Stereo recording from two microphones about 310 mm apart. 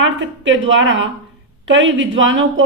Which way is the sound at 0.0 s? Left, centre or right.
Right.